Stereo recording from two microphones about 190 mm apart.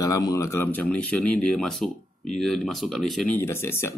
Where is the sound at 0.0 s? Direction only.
15° left (ahead or behind).